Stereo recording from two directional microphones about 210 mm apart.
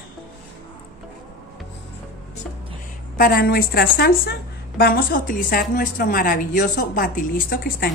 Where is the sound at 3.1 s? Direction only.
45° left (ahead or behind).